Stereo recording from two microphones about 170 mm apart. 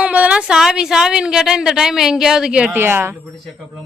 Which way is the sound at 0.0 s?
10° right (ahead or behind).